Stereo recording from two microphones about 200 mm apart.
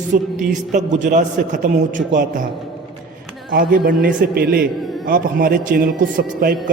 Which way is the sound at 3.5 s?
50° right (ahead or behind).